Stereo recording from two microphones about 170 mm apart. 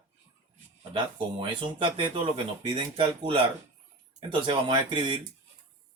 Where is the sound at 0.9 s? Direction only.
30° right (ahead or behind).